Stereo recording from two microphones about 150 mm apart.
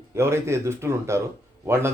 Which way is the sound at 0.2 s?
20° right (ahead or behind).